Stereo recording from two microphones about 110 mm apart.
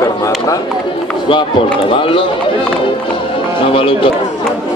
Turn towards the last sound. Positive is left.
turn(degrees=55)  # may be behind; listen again after turning